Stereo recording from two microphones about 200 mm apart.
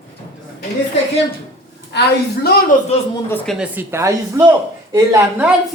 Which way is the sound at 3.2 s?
5° left (ahead or behind).